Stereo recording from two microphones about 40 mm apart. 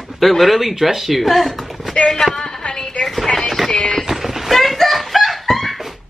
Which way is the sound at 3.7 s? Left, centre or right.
Left.